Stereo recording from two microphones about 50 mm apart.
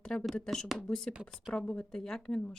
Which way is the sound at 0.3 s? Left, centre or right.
Centre.